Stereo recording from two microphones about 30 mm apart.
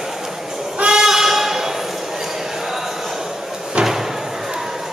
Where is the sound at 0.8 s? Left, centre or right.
Centre.